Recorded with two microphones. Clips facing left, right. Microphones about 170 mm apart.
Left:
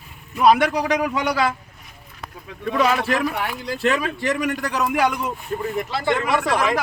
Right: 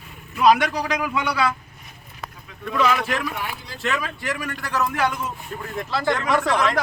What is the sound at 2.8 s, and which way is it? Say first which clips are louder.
A man's voice: left 2 dB; 35° left (ahead or behind).